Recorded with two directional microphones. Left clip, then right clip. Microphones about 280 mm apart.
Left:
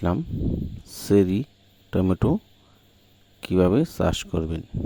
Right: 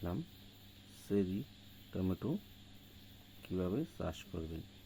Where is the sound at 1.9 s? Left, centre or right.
Left.